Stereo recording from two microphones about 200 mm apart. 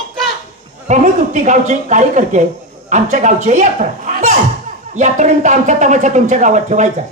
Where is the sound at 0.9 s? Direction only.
40° right (ahead or behind).